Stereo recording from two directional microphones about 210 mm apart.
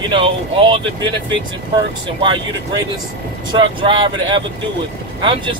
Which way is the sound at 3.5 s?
25° right (ahead or behind).